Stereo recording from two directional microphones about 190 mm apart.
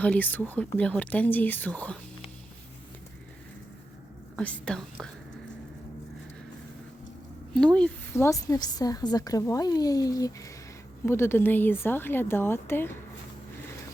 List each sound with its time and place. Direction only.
0.0 s speech: 10° left (ahead or behind)
4.4 s speech: 5° left (ahead or behind)
7.5 s a woman's voice: 5° left (ahead or behind)